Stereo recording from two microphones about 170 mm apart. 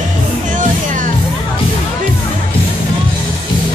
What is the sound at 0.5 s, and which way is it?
Music, 50° right (ahead or behind).